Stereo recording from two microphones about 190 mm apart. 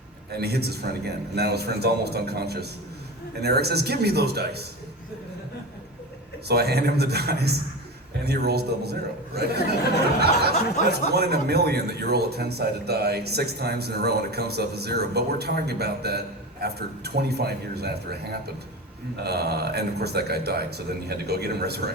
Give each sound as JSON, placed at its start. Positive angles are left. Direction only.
{"t": 0.3, "sound": "a man's voice", "side_deg": -55}
{"t": 6.5, "sound": "a man's voice", "side_deg": -55}
{"t": 10.8, "sound": "speech", "side_deg": 40}
{"t": 11.1, "sound": "a man's voice", "side_deg": -60}